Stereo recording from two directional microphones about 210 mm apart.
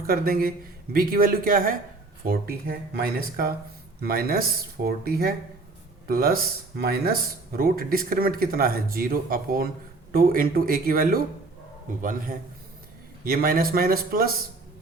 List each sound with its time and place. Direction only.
0.1 s speech: 45° right (ahead or behind)
13.2 s speech: 45° right (ahead or behind)